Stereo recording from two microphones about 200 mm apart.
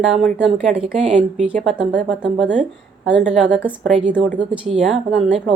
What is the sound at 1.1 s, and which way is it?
Speech, 35° right (ahead or behind).